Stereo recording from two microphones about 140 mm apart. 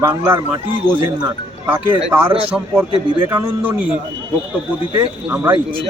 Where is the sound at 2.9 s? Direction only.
40° right (ahead or behind).